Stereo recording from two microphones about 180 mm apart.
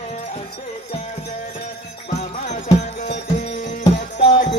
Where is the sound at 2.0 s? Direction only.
40° left (ahead or behind).